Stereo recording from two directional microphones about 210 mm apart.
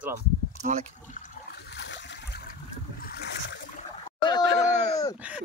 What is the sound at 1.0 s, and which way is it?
Water, 35° left (ahead or behind).